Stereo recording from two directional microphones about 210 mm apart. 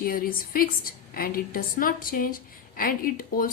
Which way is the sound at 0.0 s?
45° left (ahead or behind).